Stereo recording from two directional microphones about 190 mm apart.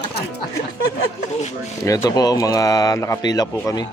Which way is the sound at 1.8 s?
15° left (ahead or behind).